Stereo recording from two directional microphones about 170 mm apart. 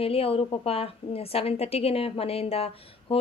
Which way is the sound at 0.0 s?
35° left (ahead or behind).